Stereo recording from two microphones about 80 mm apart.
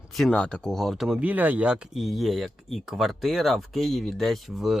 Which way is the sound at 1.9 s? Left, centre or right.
Centre.